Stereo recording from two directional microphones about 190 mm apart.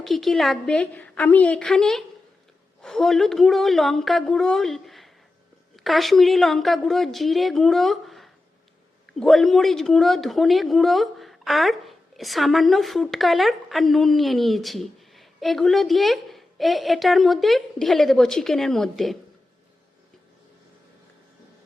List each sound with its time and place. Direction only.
0.0 s a woman's voice: centre (ahead or behind)